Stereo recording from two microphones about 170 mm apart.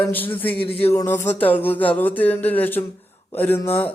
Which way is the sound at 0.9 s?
15° left (ahead or behind).